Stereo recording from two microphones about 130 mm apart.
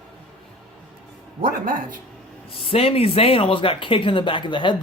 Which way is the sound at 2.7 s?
50° left (ahead or behind).